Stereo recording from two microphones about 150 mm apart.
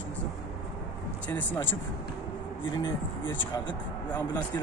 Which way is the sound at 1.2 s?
15° left (ahead or behind).